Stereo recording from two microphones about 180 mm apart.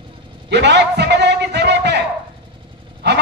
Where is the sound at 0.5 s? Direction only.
70° right (ahead or behind).